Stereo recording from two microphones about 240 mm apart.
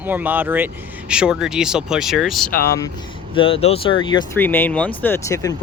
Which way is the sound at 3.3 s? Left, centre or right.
Left.